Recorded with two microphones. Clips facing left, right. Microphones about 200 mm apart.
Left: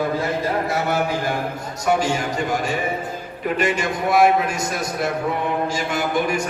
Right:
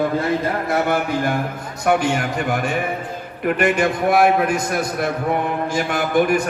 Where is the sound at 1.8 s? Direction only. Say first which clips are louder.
Right 2 dB; 60° right (ahead or behind).